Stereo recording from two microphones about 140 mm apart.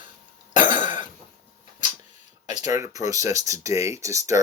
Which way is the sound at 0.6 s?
35° right (ahead or behind).